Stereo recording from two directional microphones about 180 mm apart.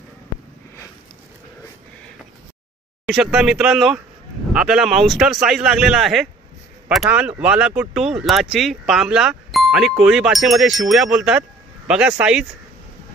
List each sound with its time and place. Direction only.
3.1 s speech: 5° right (ahead or behind)